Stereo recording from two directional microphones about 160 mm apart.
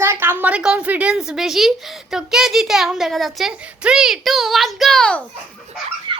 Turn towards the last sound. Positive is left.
turn(degrees=-30)  # may be behind; listen again after turning